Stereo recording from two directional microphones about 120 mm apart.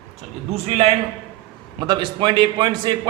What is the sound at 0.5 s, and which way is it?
Speech, 65° right (ahead or behind).